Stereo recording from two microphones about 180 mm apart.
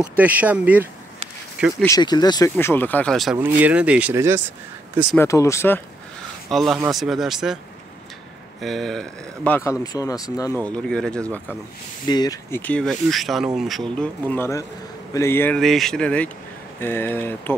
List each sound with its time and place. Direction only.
0.2 s speech: 10° right (ahead or behind)
1.9 s speech: 25° left (ahead or behind)
2.5 s speech: 10° left (ahead or behind)
3.3 s speech: 10° right (ahead or behind)
5.1 s speech: 15° left (ahead or behind)
6.5 s speech: centre (ahead or behind)
8.5 s speech: centre (ahead or behind); by 10.6 s 20° left (ahead or behind)
10.6 s speech: 5° left (ahead or behind)
12.1 s speech: 20° left (ahead or behind)